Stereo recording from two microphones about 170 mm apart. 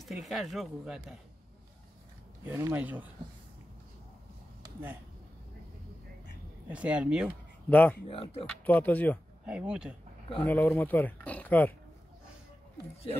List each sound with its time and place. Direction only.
0.0 s speech: centre (ahead or behind)
2.4 s speech: 10° right (ahead or behind)
6.7 s speech: 5° right (ahead or behind)
7.7 s speech: 10° left (ahead or behind)
8.1 s speech: 35° left (ahead or behind)
8.5 s speech: 10° left (ahead or behind)
9.5 s speech: 5° right (ahead or behind)
10.4 s speech: 10° left (ahead or behind)